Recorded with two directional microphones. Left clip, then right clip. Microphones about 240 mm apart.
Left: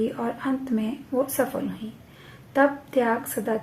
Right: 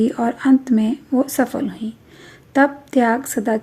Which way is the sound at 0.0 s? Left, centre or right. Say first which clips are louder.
Right 8 dB; right.